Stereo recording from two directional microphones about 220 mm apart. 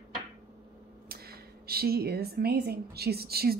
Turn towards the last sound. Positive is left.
turn(degrees=-45)  # may be behind; listen again after turning